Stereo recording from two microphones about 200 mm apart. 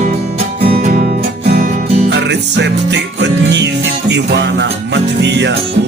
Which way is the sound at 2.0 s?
60° right (ahead or behind).